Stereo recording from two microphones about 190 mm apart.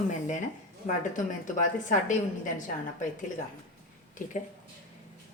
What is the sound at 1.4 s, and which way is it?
A woman's voice, 40° left (ahead or behind).